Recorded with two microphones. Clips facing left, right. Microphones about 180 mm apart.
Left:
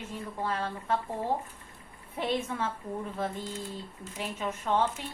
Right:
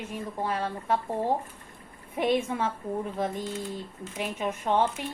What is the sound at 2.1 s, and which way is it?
A woman's voice, 15° right (ahead or behind).